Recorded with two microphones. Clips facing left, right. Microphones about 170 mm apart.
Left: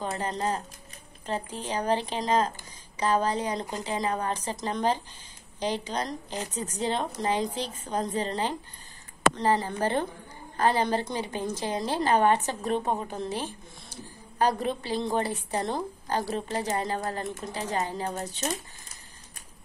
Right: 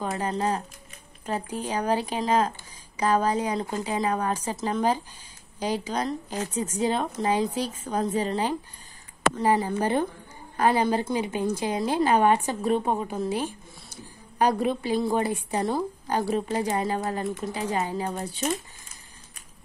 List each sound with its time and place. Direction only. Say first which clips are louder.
0.0 s a woman's voice: right 3 dB; 10° right (ahead or behind)